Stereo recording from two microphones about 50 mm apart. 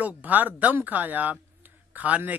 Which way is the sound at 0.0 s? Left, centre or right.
Right.